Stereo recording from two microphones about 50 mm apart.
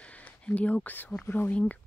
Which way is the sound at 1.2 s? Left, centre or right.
Left.